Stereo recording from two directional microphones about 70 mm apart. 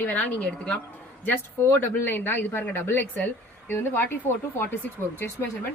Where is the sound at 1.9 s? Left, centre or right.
Left.